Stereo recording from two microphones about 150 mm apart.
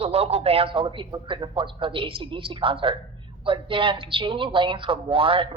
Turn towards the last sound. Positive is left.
turn(degrees=-35)  # may be behind; listen again after turning